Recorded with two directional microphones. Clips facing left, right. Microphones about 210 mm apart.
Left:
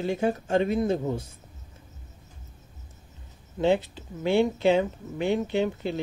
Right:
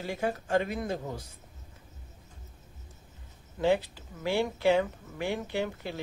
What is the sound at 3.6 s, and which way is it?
Speech, 25° left (ahead or behind).